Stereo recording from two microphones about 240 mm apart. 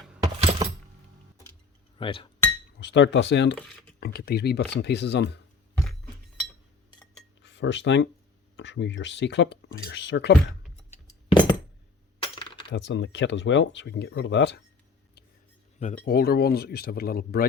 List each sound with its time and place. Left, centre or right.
0.2 s keys jangling: right
2.0 s speech: left
2.8 s speech: left
7.4 s speech: left
10.9 s music: left
12.2 s coin: left
12.7 s speech: left
15.8 s speech: left